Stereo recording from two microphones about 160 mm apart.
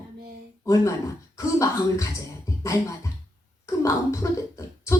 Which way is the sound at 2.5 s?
20° left (ahead or behind).